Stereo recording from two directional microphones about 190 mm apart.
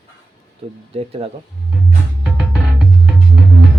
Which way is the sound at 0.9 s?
30° right (ahead or behind).